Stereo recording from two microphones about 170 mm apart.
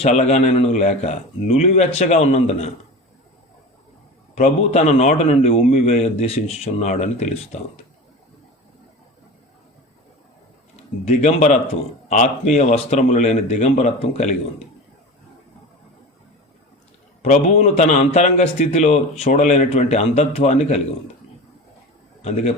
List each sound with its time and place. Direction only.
0.0 s a man's voice: 40° left (ahead or behind)
4.4 s a man's voice: 40° left (ahead or behind)
11.0 s a man's voice: 40° left (ahead or behind)
17.2 s a man's voice: 40° left (ahead or behind)
22.2 s a man's voice: 40° left (ahead or behind)